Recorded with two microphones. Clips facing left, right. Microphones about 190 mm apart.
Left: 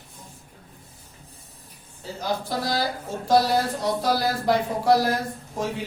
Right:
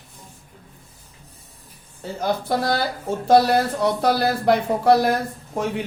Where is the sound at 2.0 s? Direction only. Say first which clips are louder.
Right 4 dB; 60° right (ahead or behind).